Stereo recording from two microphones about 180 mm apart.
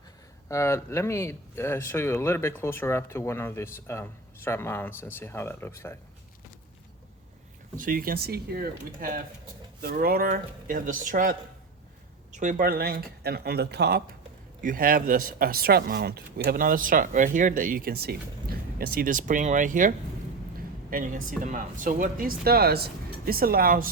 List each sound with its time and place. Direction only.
0.4 s speech: 15° left (ahead or behind)
7.8 s speech: 50° right (ahead or behind)
14.6 s speech: 50° right (ahead or behind)
20.9 s speech: 50° right (ahead or behind)